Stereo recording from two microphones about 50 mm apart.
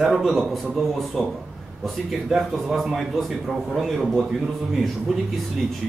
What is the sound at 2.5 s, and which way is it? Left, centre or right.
A man's voice, centre.